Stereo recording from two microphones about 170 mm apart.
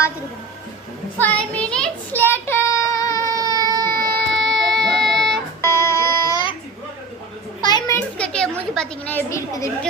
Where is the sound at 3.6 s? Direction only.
55° right (ahead or behind).